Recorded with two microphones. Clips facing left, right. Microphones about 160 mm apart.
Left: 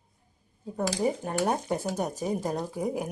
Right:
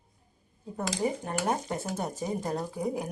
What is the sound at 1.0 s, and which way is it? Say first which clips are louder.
Speech: left 2 dB; 10° left (ahead or behind).